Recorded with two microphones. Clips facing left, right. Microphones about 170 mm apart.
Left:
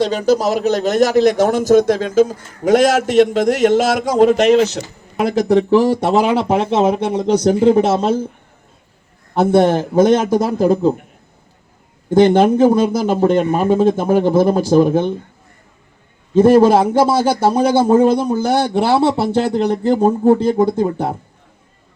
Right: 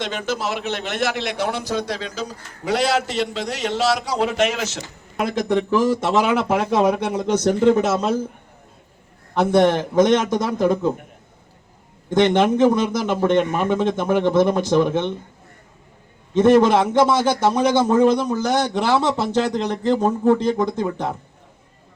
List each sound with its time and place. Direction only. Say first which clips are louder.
0.0 s a man's voice: left 10 dB; 35° left (ahead or behind)
9.3 s a man's voice: left 3 dB; 30° left (ahead or behind)
12.1 s a man's voice: left 5 dB; 30° left (ahead or behind)
16.3 s a man's voice: left 4 dB; 30° left (ahead or behind)